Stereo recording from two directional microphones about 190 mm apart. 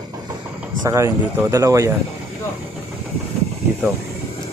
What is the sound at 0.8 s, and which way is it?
Speech, 15° right (ahead or behind).